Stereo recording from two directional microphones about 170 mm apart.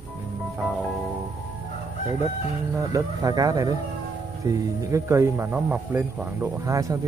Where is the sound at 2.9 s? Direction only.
20° right (ahead or behind).